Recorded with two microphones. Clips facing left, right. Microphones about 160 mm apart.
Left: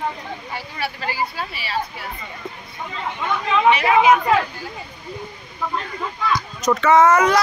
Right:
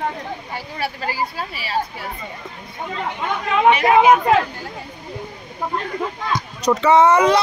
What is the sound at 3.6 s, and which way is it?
Speech, 50° right (ahead or behind).